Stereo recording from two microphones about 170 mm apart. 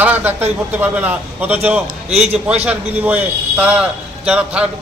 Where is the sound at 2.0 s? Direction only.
40° right (ahead or behind).